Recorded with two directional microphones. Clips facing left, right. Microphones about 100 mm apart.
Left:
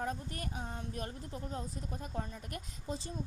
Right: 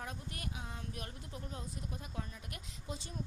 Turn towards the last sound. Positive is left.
turn(degrees=35)  # may be behind; listen again after turning